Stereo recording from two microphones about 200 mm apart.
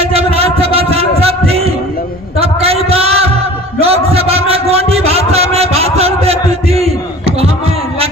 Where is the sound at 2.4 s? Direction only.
30° right (ahead or behind).